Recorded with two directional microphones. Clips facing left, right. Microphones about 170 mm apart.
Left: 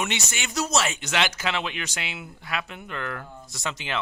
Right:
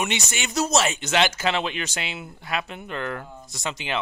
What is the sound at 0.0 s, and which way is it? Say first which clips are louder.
Speech: right 2 dB; 20° right (ahead or behind).